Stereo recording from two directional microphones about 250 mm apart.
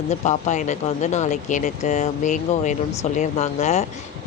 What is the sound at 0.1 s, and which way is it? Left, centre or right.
Speech, left.